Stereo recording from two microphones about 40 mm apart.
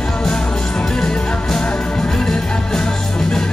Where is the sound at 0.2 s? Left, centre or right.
Centre.